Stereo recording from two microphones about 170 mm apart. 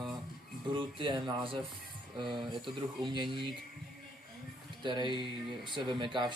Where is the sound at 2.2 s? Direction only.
Centre (ahead or behind).